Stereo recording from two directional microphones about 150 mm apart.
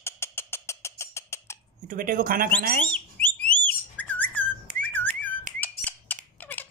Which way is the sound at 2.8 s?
10° left (ahead or behind).